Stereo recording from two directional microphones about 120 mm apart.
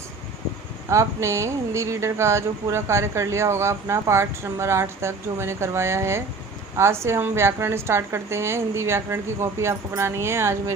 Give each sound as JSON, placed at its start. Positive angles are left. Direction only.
{"t": 0.9, "sound": "speech", "side_deg": -25}